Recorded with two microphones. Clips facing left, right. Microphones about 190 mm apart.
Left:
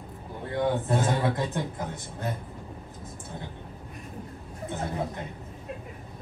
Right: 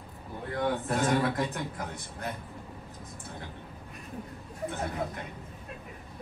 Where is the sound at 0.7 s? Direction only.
25° left (ahead or behind).